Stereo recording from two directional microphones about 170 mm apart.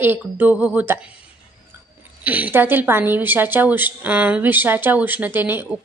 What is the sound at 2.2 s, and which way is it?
Speech, 10° right (ahead or behind).